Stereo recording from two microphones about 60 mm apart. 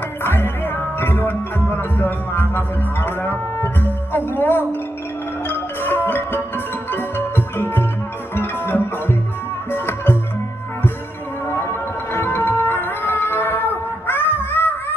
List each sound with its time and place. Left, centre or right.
0.2 s music: left
11.5 s music: left